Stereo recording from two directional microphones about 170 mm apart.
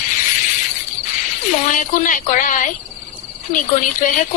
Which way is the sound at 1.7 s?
50° left (ahead or behind).